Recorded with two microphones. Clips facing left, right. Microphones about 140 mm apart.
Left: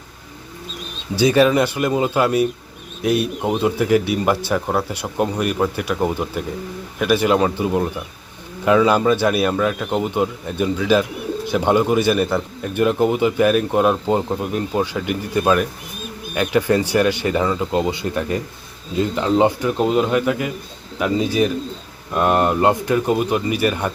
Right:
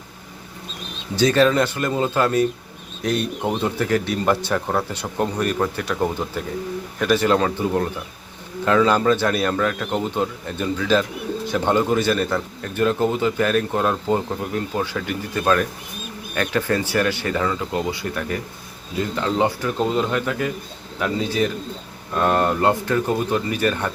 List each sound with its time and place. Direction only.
1.1 s speech: 10° left (ahead or behind)